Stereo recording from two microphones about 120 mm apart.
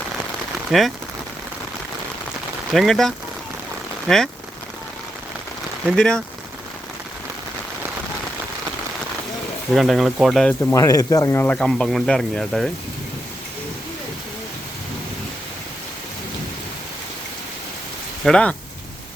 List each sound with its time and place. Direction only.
0.7 s speech: centre (ahead or behind)
2.7 s speech: centre (ahead or behind)
6.0 s speech: 5° left (ahead or behind)
9.7 s speech: centre (ahead or behind)
10.8 s speech: 30° left (ahead or behind)
11.5 s speech: 5° left (ahead or behind)
18.3 s speech: 5° left (ahead or behind)